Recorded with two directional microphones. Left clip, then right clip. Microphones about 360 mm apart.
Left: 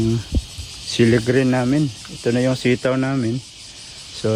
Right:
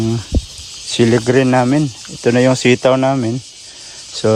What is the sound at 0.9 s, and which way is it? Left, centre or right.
Speech, centre.